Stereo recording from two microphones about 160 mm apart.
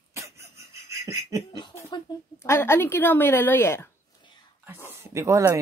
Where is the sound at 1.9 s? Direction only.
15° left (ahead or behind).